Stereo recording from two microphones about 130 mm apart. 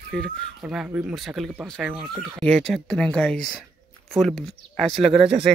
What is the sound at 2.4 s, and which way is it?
Speech, 5° left (ahead or behind).